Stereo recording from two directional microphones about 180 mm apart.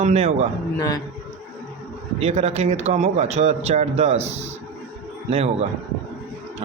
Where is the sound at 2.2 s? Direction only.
35° right (ahead or behind).